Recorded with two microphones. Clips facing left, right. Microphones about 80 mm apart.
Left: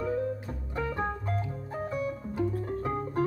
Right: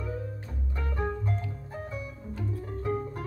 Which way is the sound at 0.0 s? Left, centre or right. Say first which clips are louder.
Left 7 dB; left.